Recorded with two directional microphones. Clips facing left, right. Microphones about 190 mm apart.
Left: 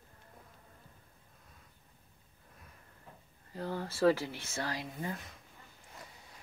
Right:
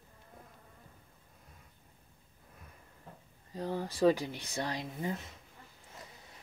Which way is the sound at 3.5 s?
15° right (ahead or behind).